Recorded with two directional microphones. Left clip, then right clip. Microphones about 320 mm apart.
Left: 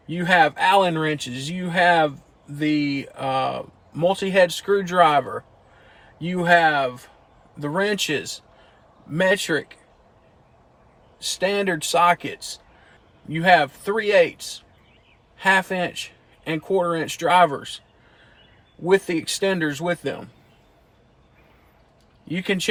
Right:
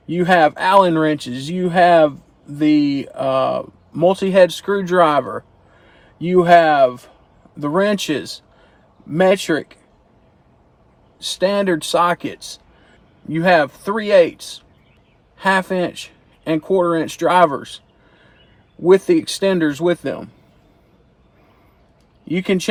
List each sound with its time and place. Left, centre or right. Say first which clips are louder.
0.1 s speech: right 4 dB; centre
11.3 s speech: right 5 dB; centre
15.4 s speech: right 2 dB; centre
18.9 s speech: right 7 dB; centre
22.3 s speech: right 4 dB; centre